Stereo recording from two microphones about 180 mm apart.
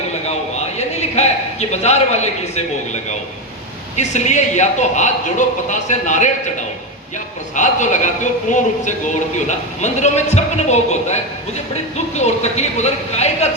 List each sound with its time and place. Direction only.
0.8 s a man's voice: 40° left (ahead or behind)
3.9 s speech: 40° left (ahead or behind)
7.5 s a man's voice: 45° left (ahead or behind)